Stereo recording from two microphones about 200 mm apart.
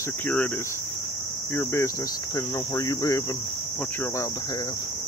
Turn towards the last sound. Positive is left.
turn(degrees=15)  # may be behind; listen again after turning